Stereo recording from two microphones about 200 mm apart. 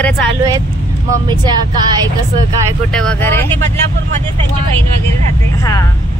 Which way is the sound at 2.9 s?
5° left (ahead or behind).